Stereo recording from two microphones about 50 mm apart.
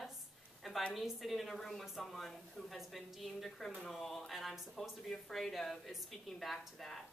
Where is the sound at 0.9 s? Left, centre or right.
Centre.